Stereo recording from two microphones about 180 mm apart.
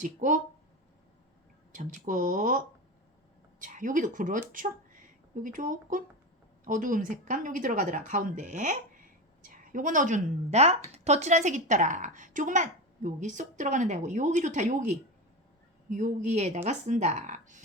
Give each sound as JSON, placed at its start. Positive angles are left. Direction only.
{"t": 0.0, "sound": "speech", "side_deg": -45}
{"t": 1.7, "sound": "speech", "side_deg": -45}
{"t": 3.6, "sound": "speech", "side_deg": -45}